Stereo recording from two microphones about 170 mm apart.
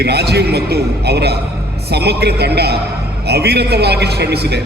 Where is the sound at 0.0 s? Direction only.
75° right (ahead or behind).